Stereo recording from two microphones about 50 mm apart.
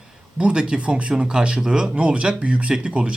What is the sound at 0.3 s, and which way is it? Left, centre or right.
A man's voice, centre.